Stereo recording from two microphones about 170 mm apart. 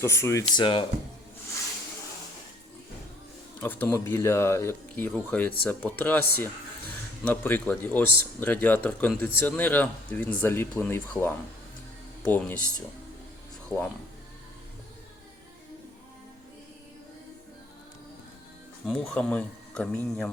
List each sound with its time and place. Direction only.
0.0 s speech: 15° left (ahead or behind)
0.4 s speech: 30° left (ahead or behind)
3.6 s speech: 10° left (ahead or behind)
18.9 s speech: 5° left (ahead or behind)